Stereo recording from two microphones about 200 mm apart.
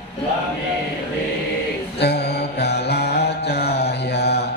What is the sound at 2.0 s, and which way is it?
Mantra, 55° left (ahead or behind).